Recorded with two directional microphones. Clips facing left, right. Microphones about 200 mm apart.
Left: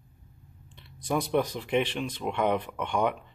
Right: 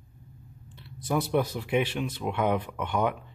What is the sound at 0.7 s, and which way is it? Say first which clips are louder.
Speech: right 1 dB; 5° right (ahead or behind).